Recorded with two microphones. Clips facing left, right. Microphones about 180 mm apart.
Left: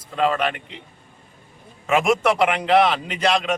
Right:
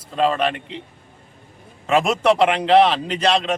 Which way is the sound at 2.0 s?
30° right (ahead or behind).